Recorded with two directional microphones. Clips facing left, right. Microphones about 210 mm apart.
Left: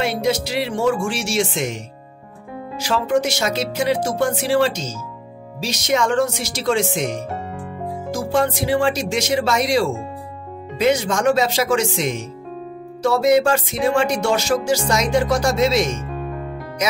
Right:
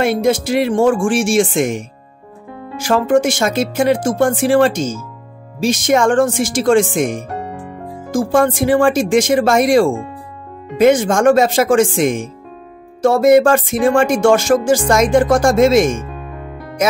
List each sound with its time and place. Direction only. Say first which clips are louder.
0.0 s music: right 6 dB; 50° right (ahead or behind)
2.8 s music: right 6 dB; 50° right (ahead or behind)